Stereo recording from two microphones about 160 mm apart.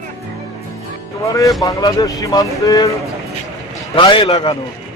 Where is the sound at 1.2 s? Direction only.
20° left (ahead or behind).